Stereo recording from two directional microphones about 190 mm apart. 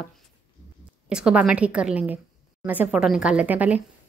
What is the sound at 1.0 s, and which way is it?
A woman's voice, 5° right (ahead or behind).